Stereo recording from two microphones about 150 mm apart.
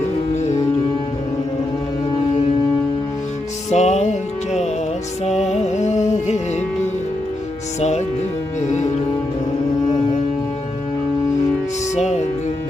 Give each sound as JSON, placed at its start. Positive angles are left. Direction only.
{"t": 0.3, "sound": "music", "side_deg": 50}
{"t": 3.7, "sound": "music", "side_deg": 50}
{"t": 7.8, "sound": "music", "side_deg": 50}
{"t": 11.9, "sound": "music", "side_deg": 50}